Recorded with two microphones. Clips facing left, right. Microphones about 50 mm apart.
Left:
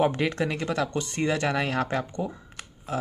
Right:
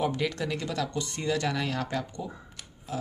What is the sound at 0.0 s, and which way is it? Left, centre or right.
Speech, left.